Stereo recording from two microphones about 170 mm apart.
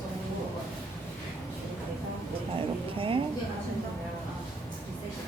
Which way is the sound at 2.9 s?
30° right (ahead or behind).